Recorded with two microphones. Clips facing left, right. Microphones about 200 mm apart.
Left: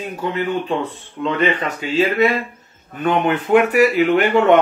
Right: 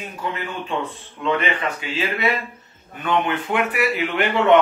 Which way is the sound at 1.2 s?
35° left (ahead or behind).